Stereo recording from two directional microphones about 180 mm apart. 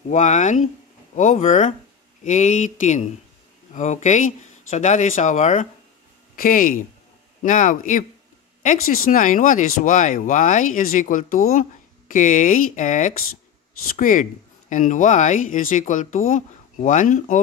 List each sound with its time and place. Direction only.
0.1 s speech: 45° left (ahead or behind)